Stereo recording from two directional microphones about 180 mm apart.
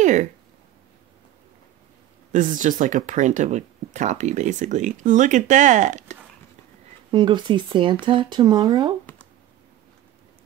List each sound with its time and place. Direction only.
0.0 s speech: 45° right (ahead or behind)
2.3 s speech: 45° right (ahead or behind)
7.1 s speech: 25° right (ahead or behind)